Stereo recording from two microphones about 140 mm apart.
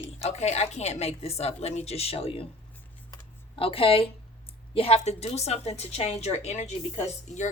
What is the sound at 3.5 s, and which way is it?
A woman's voice, 40° left (ahead or behind).